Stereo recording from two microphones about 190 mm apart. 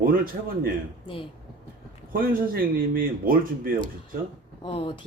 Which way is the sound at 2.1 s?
50° right (ahead or behind).